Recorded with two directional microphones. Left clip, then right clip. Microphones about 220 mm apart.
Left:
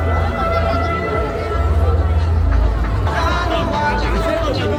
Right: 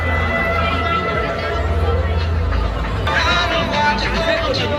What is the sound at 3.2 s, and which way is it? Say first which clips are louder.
Music: right 2 dB; 50° left (ahead or behind).